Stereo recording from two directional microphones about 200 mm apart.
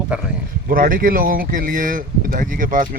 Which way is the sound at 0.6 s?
45° right (ahead or behind).